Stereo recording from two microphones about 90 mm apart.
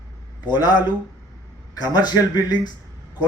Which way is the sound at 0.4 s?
50° left (ahead or behind).